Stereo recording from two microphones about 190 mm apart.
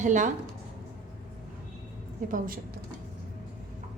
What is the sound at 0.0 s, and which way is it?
Speech, 40° right (ahead or behind).